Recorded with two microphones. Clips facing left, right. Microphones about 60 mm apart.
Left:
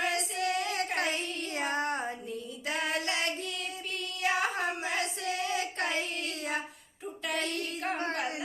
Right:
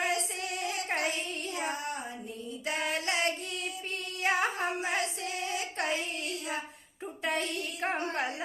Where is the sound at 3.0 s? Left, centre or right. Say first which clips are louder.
Right 2 dB; right.